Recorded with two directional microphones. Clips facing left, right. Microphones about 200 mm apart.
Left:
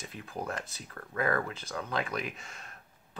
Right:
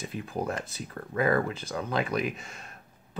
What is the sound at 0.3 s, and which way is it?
Speech, 25° right (ahead or behind).